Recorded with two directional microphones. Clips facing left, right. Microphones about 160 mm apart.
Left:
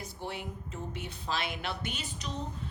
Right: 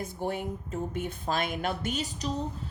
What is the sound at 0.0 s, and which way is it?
A woman's voice, 50° right (ahead or behind).